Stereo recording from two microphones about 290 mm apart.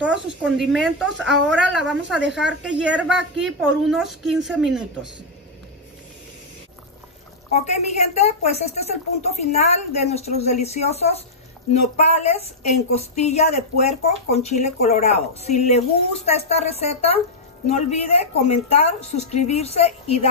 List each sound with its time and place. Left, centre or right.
0.0 s a woman's voice: centre
7.6 s a woman's voice: left